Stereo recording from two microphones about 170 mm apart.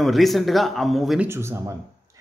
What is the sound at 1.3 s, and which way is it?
Speech, 15° right (ahead or behind).